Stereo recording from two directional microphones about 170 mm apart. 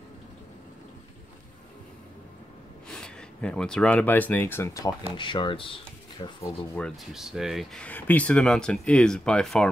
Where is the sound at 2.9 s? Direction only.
5° left (ahead or behind); by 6.3 s 30° left (ahead or behind).